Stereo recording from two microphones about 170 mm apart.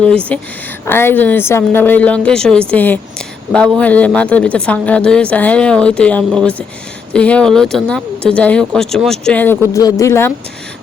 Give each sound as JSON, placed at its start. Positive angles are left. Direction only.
{"t": 0.3, "sound": "a woman's voice", "side_deg": 10}